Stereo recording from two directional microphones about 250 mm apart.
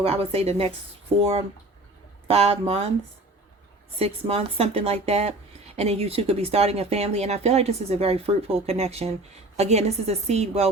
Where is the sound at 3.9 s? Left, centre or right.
Right.